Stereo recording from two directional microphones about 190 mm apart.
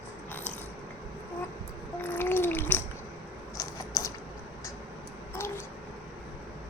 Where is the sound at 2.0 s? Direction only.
10° left (ahead or behind).